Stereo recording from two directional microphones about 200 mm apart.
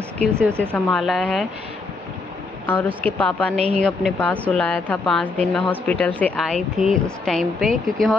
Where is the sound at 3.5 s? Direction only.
30° right (ahead or behind).